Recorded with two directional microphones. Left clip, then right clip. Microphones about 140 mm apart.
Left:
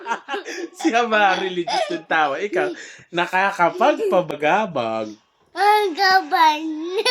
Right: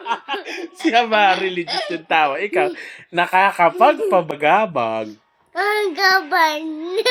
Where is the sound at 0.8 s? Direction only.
15° right (ahead or behind).